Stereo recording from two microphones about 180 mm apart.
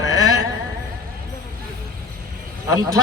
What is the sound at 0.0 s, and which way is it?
Music, 20° right (ahead or behind).